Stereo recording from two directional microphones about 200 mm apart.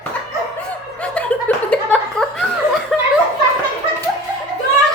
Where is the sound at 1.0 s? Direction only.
5° left (ahead or behind).